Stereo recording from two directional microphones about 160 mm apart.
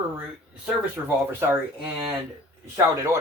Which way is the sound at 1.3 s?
15° right (ahead or behind).